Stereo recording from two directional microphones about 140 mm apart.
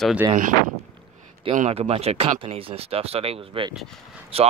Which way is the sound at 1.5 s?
50° right (ahead or behind).